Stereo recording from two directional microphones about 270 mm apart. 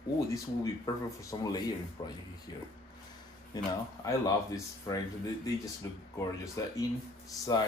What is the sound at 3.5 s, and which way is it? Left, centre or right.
Speech, centre.